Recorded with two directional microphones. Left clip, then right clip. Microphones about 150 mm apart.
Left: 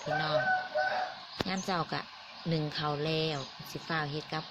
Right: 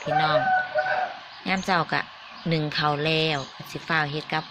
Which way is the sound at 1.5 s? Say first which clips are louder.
Right 12 dB; 5° left (ahead or behind).